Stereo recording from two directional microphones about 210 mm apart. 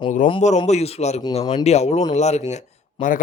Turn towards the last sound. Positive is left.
turn(degrees=35)  # may be behind; listen again after turning